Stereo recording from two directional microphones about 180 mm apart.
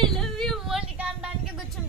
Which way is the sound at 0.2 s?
Centre (ahead or behind).